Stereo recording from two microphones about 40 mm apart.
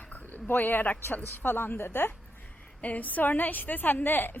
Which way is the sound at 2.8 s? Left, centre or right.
Left.